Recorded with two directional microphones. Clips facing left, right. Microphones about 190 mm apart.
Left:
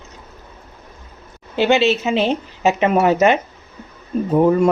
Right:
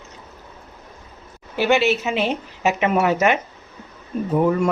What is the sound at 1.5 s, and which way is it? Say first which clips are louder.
Speech: left 3 dB; 25° left (ahead or behind).